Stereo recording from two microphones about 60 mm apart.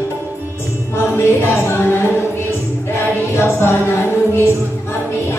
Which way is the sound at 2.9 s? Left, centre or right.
Left.